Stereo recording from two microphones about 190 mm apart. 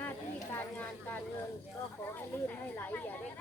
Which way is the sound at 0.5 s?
10° left (ahead or behind).